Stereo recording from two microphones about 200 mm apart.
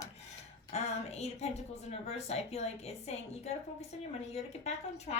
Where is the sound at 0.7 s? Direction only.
30° left (ahead or behind).